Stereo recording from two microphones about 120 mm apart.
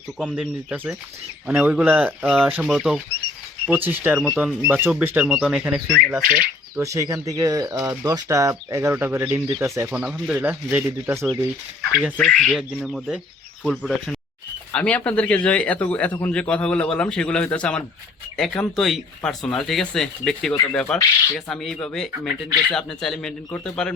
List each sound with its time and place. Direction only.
0.2 s speech: centre (ahead or behind)
1.5 s speech: 10° right (ahead or behind)
3.7 s speech: 15° right (ahead or behind)
6.7 s speech: 25° right (ahead or behind)
10.0 s speech: 5° right (ahead or behind)
12.1 s a man's voice: 5° left (ahead or behind)